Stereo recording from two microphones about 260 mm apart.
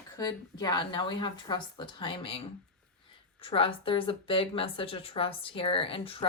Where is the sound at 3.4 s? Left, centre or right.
Left.